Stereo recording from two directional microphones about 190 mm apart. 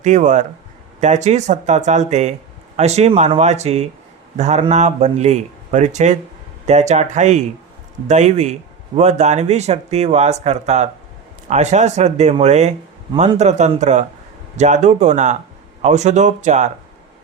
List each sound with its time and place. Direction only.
0.0 s speech: 40° right (ahead or behind)